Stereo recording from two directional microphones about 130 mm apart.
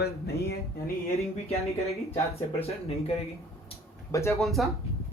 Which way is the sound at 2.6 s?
50° left (ahead or behind).